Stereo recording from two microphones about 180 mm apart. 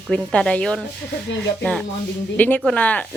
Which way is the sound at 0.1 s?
5° left (ahead or behind).